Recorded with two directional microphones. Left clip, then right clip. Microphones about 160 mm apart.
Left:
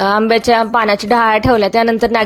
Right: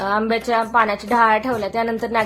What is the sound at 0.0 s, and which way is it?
A woman's voice, 55° left (ahead or behind).